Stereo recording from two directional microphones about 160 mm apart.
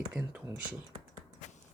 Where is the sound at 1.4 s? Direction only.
45° left (ahead or behind).